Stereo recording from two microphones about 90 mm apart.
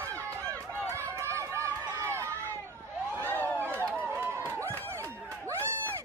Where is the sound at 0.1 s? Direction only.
20° left (ahead or behind).